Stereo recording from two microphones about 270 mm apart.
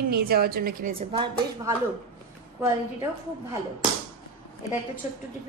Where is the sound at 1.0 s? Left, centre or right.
Centre.